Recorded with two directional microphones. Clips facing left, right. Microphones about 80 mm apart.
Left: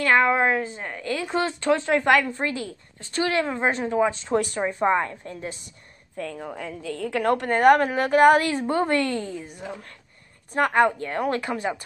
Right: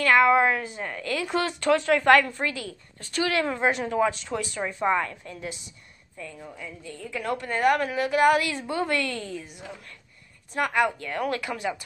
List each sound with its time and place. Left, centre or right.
0.0 s speech: left
2.0 s a woman's voice: centre
2.3 s speech: left
4.1 s a woman's voice: left
6.1 s a woman's voice: left